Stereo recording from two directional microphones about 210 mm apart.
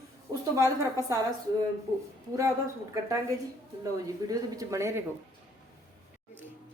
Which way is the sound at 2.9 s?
15° right (ahead or behind).